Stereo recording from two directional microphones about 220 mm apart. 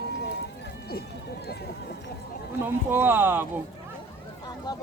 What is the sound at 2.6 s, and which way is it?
Speech, 10° right (ahead or behind).